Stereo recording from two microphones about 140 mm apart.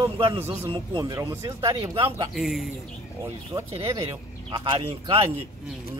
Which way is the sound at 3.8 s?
25° right (ahead or behind).